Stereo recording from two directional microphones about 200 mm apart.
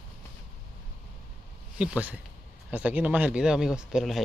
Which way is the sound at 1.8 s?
5° right (ahead or behind).